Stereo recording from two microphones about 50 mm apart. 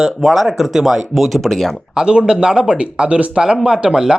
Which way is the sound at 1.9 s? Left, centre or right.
Centre.